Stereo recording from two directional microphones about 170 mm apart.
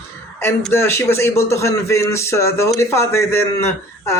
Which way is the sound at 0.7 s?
15° left (ahead or behind).